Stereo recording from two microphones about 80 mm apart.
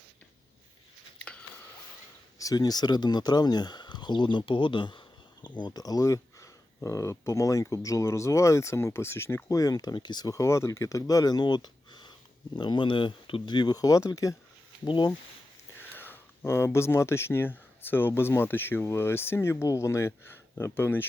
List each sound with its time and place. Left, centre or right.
2.4 s speech: left
9.5 s speech: left
10.2 s speech: left
14.8 s speech: left
15.8 s speech: left